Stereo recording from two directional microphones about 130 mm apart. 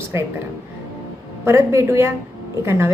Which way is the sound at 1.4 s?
20° right (ahead or behind).